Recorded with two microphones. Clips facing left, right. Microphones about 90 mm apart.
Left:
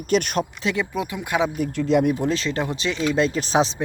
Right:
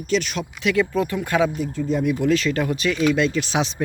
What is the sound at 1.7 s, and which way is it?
Speech, 90° left.